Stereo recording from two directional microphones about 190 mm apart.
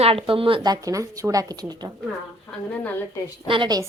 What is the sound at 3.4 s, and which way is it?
Speech, 25° right (ahead or behind).